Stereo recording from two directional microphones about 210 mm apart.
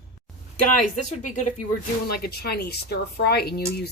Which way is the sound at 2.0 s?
45° left (ahead or behind).